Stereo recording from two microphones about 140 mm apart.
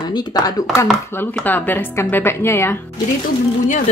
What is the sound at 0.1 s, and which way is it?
Speech, 30° left (ahead or behind).